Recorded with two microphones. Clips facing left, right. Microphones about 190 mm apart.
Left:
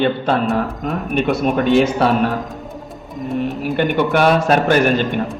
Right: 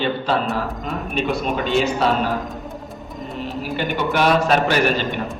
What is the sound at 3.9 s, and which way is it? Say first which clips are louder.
A man's voice: left 2 dB; 55° left (ahead or behind).